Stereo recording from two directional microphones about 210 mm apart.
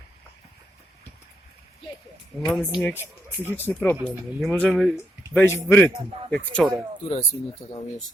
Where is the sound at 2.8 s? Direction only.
10° left (ahead or behind).